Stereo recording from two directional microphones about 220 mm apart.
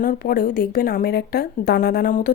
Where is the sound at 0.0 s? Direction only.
40° left (ahead or behind).